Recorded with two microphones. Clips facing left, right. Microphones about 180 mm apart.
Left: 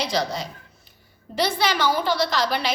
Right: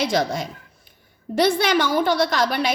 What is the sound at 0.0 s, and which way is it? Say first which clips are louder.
A woman's voice: right 4 dB; 50° right (ahead or behind).